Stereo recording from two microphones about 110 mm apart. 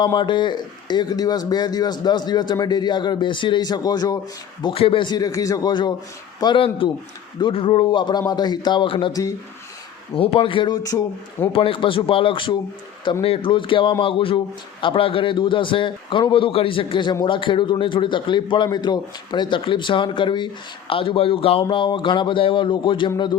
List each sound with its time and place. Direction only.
0.0 s speech: 45° left (ahead or behind)
4.6 s a man's voice: 55° left (ahead or behind)
10.2 s a man's voice: 55° left (ahead or behind)